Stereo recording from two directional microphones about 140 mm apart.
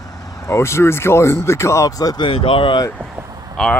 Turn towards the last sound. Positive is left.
turn(degrees=5)  # may be behind; listen again after turning